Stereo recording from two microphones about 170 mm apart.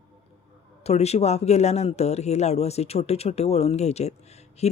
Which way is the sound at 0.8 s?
40° left (ahead or behind).